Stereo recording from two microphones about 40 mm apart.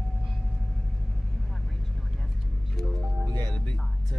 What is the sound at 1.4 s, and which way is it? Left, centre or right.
Vehicle, centre.